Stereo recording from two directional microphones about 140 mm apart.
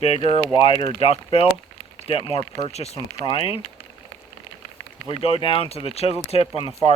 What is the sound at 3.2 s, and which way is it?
Speech, 40° left (ahead or behind).